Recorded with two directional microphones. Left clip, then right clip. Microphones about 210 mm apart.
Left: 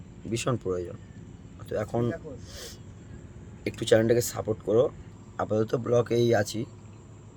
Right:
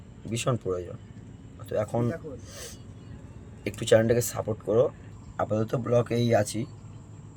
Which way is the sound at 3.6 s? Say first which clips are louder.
Right 1 dB; centre (ahead or behind).